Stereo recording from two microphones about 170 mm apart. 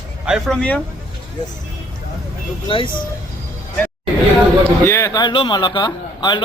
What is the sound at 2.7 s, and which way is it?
Speech, 30° left (ahead or behind).